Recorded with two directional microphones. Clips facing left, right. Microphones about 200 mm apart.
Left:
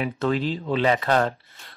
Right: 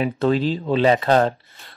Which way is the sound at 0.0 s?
35° right (ahead or behind).